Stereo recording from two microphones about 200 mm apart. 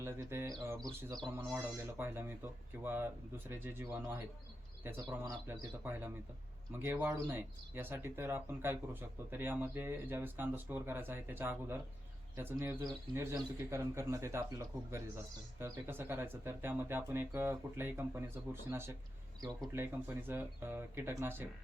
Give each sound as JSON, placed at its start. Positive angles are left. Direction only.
{"t": 0.0, "sound": "speech", "side_deg": -10}
{"t": 15.5, "sound": "speech", "side_deg": -10}